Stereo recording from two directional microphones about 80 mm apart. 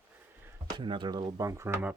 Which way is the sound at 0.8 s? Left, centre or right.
Right.